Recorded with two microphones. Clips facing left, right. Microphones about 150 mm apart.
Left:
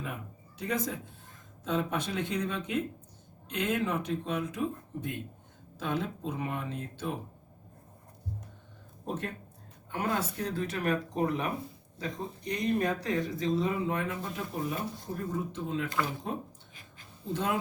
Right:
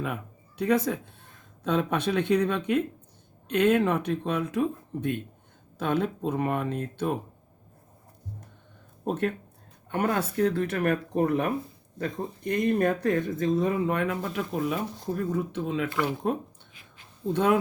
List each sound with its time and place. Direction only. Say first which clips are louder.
0.6 s speech: right 8 dB; 65° right (ahead or behind)
9.0 s speech: right 8 dB; 65° right (ahead or behind); by 14.8 s 85° right
15.1 s speech: right 8 dB; 65° right (ahead or behind)